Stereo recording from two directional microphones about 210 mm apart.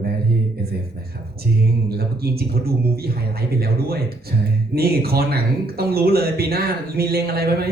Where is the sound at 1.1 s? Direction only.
45° right (ahead or behind).